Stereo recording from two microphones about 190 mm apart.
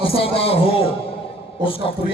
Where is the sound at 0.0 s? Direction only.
30° left (ahead or behind).